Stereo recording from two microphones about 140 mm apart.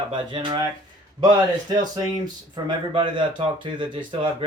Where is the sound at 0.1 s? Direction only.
35° right (ahead or behind).